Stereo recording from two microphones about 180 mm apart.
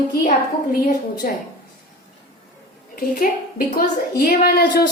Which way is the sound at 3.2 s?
50° left (ahead or behind).